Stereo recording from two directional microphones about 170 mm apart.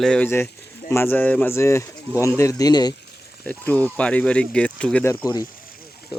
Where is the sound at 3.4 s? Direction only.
10° left (ahead or behind).